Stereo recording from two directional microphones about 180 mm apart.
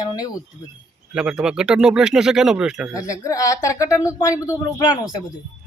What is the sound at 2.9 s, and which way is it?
A woman's voice, 20° left (ahead or behind).